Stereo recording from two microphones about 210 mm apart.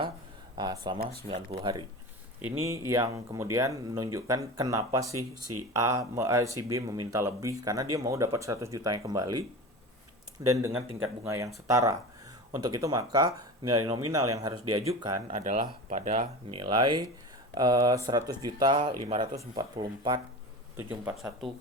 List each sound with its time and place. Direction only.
0.5 s speech: 20° right (ahead or behind)
10.4 s speech: 15° right (ahead or behind)
15.4 s speech: 35° right (ahead or behind)
16.5 s speech: 25° right (ahead or behind)
21.0 s speech: 10° right (ahead or behind)